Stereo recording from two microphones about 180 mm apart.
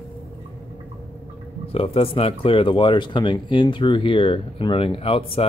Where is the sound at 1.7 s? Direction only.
30° left (ahead or behind).